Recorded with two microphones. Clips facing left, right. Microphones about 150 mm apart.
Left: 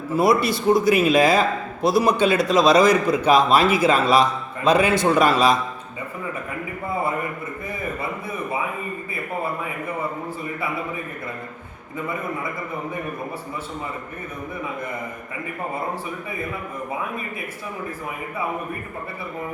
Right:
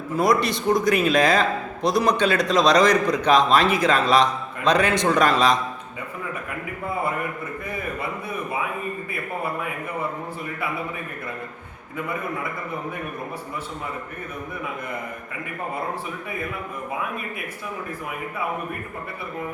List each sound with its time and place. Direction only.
0.2 s a man's voice: 5° left (ahead or behind)